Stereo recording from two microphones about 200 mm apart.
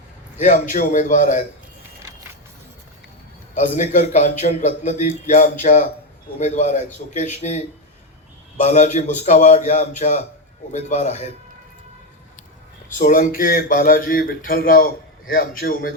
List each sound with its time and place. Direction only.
0.3 s a man's voice: 40° left (ahead or behind)
3.5 s a man's voice: 35° left (ahead or behind)
13.0 s a man's voice: 45° left (ahead or behind)